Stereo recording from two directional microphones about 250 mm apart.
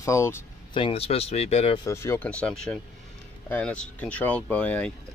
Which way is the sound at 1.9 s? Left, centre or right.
Centre.